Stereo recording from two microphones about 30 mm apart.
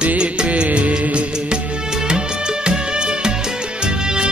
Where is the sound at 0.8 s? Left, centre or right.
Right.